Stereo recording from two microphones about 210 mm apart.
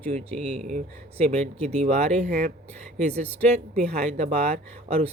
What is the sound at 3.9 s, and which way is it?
Speech, 30° right (ahead or behind).